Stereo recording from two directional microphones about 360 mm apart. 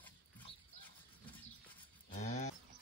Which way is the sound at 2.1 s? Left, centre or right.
Centre.